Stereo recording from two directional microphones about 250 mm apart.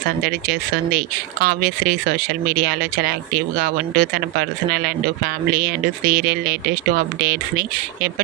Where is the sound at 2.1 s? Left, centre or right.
Right.